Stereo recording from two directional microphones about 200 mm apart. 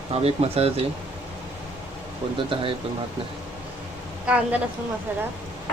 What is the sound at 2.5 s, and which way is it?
Speech, 25° right (ahead or behind).